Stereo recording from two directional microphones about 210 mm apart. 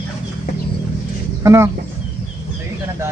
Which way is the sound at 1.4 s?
15° right (ahead or behind).